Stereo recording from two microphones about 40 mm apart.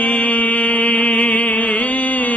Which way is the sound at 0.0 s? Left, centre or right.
Left.